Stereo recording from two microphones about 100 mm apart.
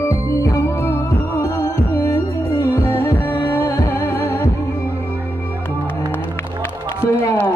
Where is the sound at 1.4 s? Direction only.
30° left (ahead or behind).